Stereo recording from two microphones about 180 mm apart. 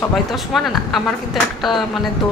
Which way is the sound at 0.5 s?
Centre (ahead or behind).